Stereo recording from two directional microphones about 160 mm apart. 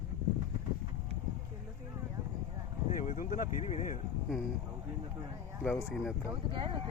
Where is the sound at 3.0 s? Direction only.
55° left (ahead or behind).